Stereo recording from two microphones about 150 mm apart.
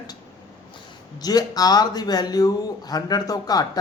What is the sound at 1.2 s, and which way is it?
A man's voice, 25° left (ahead or behind).